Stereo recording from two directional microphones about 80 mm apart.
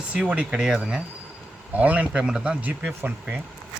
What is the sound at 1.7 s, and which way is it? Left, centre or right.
Speech, centre.